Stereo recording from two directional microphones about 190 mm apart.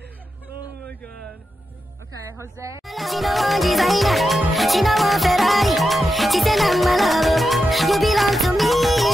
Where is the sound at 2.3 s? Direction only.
15° right (ahead or behind).